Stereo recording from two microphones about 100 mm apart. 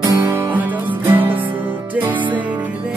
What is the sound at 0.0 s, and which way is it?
Music, 45° right (ahead or behind).